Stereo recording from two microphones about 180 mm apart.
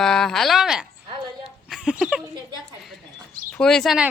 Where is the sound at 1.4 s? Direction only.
Centre (ahead or behind).